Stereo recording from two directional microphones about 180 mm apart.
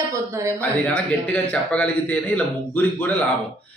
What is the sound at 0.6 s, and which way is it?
A man's voice, 5° left (ahead or behind).